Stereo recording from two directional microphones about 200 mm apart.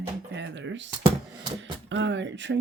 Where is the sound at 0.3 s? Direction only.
65° right (ahead or behind).